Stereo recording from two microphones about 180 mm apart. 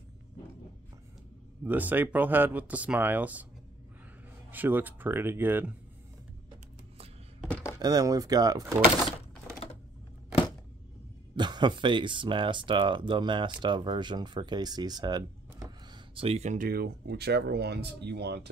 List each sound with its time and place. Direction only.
1.6 s speech: 10° right (ahead or behind)
4.5 s speech: 10° right (ahead or behind)
7.4 s a sound: 15° left (ahead or behind)
7.8 s speech: 20° right (ahead or behind)
11.3 s speech: 25° right (ahead or behind); by 18.5 s 65° right (ahead or behind)